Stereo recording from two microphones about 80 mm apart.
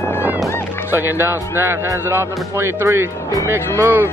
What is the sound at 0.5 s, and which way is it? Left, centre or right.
Music, left.